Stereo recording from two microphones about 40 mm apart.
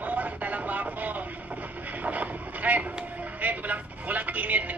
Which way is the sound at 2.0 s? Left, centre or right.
Right.